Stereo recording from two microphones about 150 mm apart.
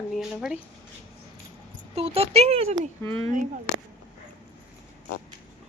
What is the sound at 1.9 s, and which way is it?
Speech, 45° right (ahead or behind).